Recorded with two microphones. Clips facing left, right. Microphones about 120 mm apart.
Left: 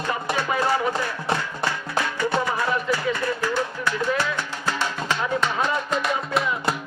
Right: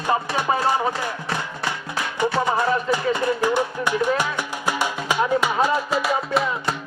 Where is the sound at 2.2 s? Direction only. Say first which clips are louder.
Right 6 dB; 20° right (ahead or behind); by 6.7 s centre (ahead or behind).